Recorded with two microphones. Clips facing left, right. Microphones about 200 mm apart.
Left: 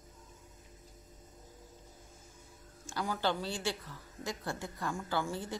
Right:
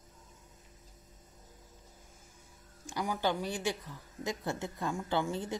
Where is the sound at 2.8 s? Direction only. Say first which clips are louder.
Right 1 dB; 15° right (ahead or behind).